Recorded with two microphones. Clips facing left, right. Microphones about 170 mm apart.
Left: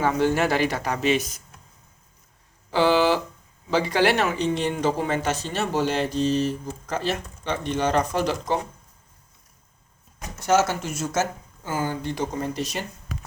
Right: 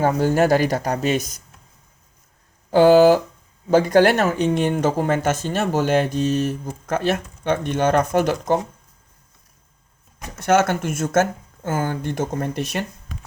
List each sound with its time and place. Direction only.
0.0 s speech: 40° right (ahead or behind)
2.6 s speech: 45° right (ahead or behind)
10.4 s speech: 55° right (ahead or behind)